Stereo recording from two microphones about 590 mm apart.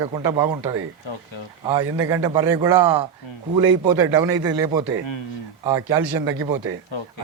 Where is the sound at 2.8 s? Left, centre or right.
Right.